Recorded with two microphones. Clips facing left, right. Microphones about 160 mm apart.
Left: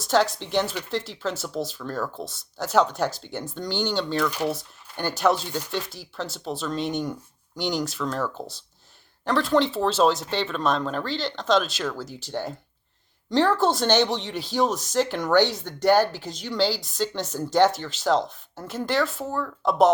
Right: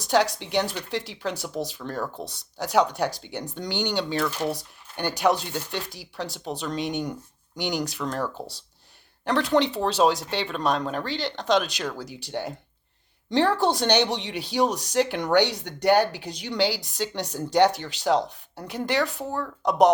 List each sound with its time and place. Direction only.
0.0 s speech: 15° right (ahead or behind)
4.3 s speech: 10° left (ahead or behind)
4.5 s speech: 15° right (ahead or behind)
13.3 s a woman's voice: 45° left (ahead or behind)
13.6 s speech: 15° right (ahead or behind)